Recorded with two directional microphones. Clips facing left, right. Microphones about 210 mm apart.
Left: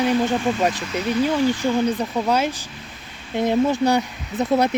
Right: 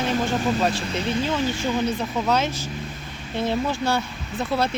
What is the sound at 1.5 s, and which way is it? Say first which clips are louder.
Speech: left 4 dB; 15° left (ahead or behind).